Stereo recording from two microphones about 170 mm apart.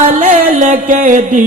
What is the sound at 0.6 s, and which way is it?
Music, 50° right (ahead or behind).